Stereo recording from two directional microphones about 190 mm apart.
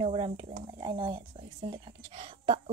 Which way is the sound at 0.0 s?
30° right (ahead or behind).